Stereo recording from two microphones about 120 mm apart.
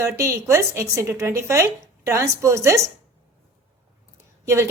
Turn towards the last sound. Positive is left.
turn(degrees=-25)  # may be behind; listen again after turning